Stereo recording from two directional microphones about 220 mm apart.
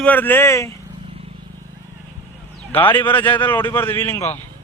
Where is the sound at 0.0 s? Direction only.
10° left (ahead or behind).